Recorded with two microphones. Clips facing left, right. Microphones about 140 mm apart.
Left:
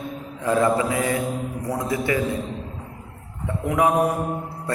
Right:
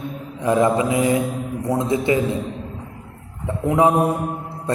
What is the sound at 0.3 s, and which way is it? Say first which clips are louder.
A man's voice: right 3 dB; 20° right (ahead or behind).